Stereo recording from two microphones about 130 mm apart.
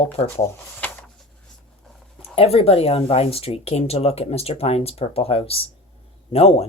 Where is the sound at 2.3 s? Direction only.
50° left (ahead or behind).